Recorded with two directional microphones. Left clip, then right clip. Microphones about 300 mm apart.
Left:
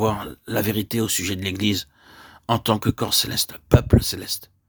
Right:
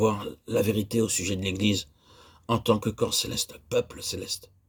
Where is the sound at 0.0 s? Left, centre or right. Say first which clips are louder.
Left 2 dB; left.